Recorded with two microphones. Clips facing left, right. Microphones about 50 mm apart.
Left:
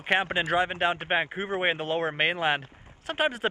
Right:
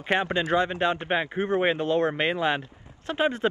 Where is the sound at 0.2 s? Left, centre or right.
Left.